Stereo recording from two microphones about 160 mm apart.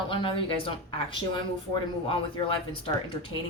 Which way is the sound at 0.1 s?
35° left (ahead or behind).